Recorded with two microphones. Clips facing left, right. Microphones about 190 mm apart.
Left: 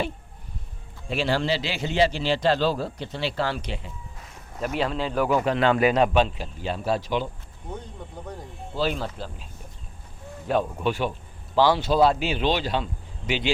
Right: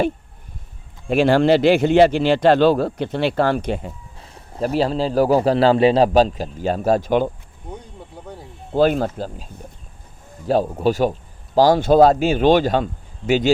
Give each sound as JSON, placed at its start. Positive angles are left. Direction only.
{"t": 1.0, "sound": "speech", "side_deg": -55}
{"t": 4.2, "sound": "a man's voice", "side_deg": -30}
{"t": 8.7, "sound": "a man's voice", "side_deg": -50}